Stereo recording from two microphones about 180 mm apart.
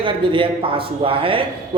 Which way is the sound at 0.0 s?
30° right (ahead or behind).